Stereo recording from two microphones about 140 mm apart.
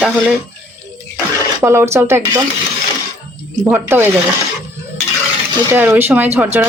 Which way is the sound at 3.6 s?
15° right (ahead or behind).